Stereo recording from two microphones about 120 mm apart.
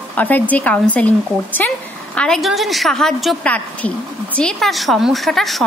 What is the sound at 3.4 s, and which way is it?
A woman's voice, 10° left (ahead or behind).